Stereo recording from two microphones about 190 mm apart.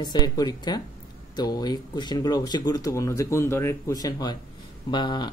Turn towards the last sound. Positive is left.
turn(degrees=25)  # may be behind; listen again after turning